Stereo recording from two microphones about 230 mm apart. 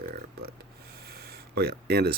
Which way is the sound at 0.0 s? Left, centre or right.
Right.